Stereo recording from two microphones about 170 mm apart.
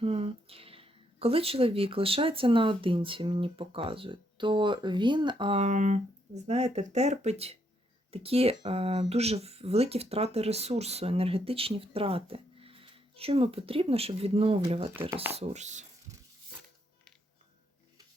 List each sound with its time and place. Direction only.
0.0 s speech: 35° right (ahead or behind)